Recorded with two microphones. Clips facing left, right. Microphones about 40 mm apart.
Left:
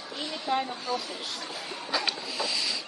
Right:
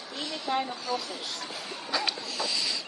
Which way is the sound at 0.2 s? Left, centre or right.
Centre.